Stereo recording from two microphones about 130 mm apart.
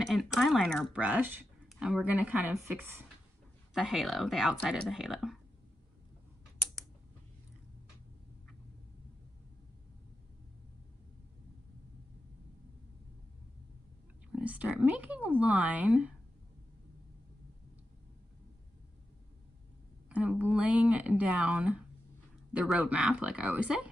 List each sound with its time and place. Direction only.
0.0 s speech: centre (ahead or behind)
0.9 s speech: 10° right (ahead or behind)
3.7 s speech: centre (ahead or behind)
14.3 s speech: 10° right (ahead or behind)
20.1 s speech: 10° right (ahead or behind)